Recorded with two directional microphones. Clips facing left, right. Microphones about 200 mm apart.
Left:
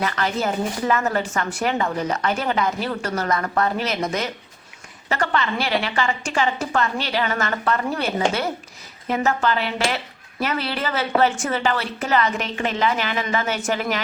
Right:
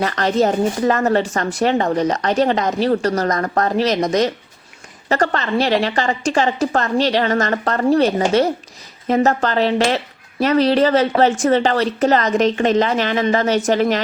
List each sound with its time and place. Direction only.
0.0 s speech: 35° right (ahead or behind)